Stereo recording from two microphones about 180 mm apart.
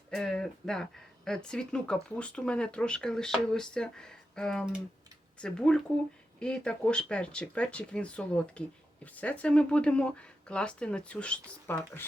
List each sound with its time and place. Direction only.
0.1 s speech: 5° left (ahead or behind)